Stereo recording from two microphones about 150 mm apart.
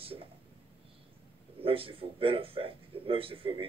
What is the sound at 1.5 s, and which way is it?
A man's voice, 40° right (ahead or behind).